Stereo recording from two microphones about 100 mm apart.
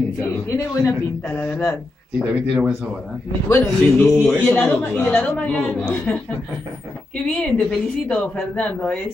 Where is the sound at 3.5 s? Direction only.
25° left (ahead or behind).